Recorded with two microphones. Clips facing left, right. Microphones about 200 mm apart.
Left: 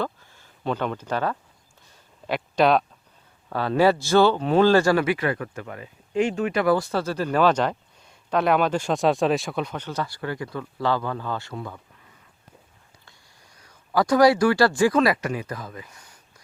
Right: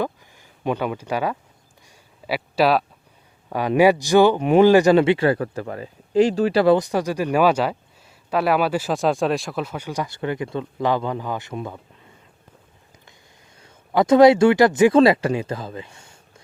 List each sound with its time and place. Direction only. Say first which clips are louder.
0.0 s a sound: right 3 dB; 15° right (ahead or behind)
3.5 s speech: right 3 dB; 15° right (ahead or behind); by 6.7 s 30° right (ahead or behind)
6.7 s speech: right 3 dB; 15° right (ahead or behind)
13.6 s speech: right 3 dB; 25° right (ahead or behind)